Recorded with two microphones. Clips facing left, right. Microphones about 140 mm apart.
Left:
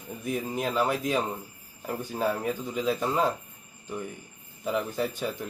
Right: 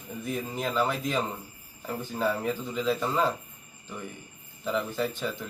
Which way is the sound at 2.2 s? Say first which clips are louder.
Even; 15° left (ahead or behind).